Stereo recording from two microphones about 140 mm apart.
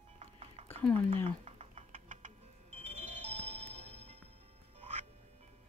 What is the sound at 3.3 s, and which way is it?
Music, 10° left (ahead or behind).